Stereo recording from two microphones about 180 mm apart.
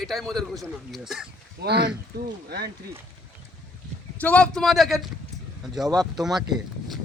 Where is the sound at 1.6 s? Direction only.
65° right (ahead or behind).